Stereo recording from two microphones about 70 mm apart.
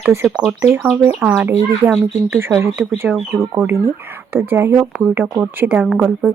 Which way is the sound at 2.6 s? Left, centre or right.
Right.